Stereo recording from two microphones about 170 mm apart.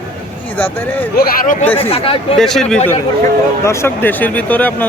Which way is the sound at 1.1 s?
60° left (ahead or behind).